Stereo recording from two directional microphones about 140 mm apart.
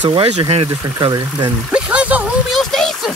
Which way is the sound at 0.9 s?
30° right (ahead or behind).